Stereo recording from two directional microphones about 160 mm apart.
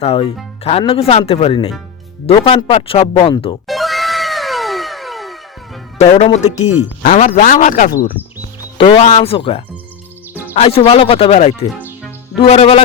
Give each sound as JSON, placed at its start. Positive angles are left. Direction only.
{"t": 0.0, "sound": "speech", "side_deg": 35}
{"t": 3.7, "sound": "cat", "side_deg": 0}
{"t": 6.0, "sound": "speech", "side_deg": 40}
{"t": 8.2, "sound": "speech", "side_deg": 15}
{"t": 9.0, "sound": "speech", "side_deg": 40}